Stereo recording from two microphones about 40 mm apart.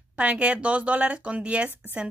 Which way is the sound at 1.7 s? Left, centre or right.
Right.